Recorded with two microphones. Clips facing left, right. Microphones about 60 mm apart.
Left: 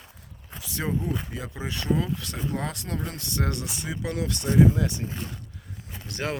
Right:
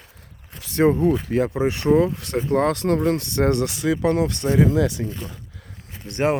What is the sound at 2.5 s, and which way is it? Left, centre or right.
Speech, right.